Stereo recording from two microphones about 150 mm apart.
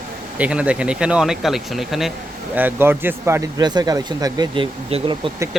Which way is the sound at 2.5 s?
15° right (ahead or behind).